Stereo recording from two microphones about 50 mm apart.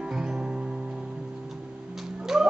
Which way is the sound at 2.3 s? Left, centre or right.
Centre.